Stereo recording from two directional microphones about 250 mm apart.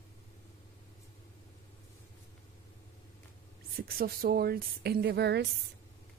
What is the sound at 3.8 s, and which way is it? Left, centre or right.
Speech, right.